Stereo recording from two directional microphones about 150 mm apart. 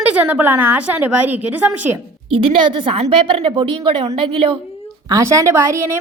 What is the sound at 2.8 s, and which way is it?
Speech, 40° right (ahead or behind).